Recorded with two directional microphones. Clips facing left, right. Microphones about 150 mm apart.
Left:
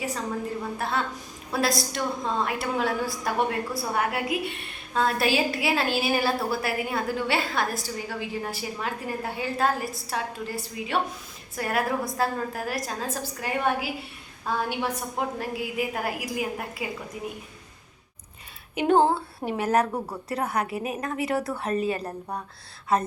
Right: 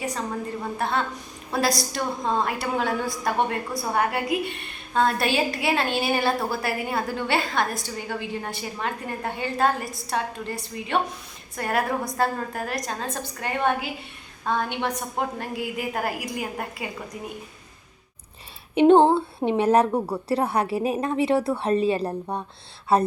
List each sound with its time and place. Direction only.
0.8 s a woman's voice: centre (ahead or behind)
18.7 s a woman's voice: 25° right (ahead or behind)